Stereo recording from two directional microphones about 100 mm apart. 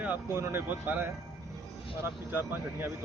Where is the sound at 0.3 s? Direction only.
25° right (ahead or behind).